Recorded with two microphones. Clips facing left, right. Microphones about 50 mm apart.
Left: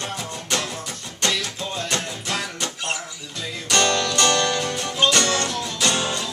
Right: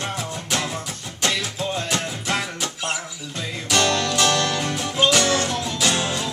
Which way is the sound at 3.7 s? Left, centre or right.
Centre.